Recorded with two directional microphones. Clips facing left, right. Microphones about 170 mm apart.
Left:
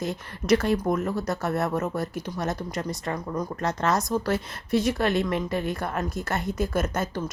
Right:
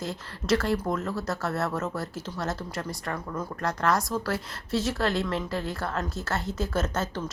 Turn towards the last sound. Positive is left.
turn(degrees=10)  # may be behind; listen again after turning